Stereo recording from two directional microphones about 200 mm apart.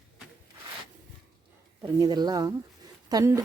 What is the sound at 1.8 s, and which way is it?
Speech, 20° right (ahead or behind).